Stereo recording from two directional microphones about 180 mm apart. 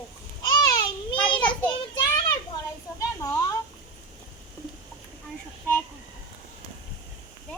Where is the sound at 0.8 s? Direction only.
25° left (ahead or behind).